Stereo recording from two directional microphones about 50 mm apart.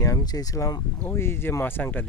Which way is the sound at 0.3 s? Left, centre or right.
Left.